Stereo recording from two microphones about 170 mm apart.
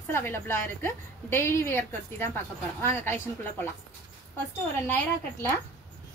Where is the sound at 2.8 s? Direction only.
15° left (ahead or behind).